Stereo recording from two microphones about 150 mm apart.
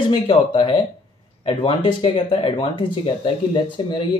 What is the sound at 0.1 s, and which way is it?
Speech, 35° left (ahead or behind).